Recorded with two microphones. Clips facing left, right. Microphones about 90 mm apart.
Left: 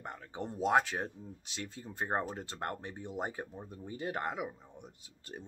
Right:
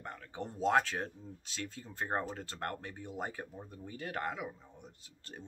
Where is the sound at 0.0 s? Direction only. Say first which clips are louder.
Left 1 dB; 20° left (ahead or behind).